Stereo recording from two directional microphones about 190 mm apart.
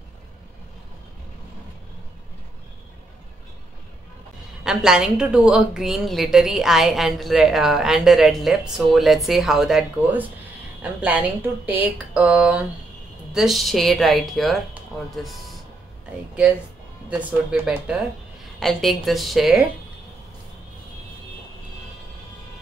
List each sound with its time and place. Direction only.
4.6 s a woman's voice: 5° right (ahead or behind)
17.1 s a woman's voice: 5° right (ahead or behind)